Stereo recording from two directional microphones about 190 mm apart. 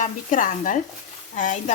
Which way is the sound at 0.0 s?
40° left (ahead or behind).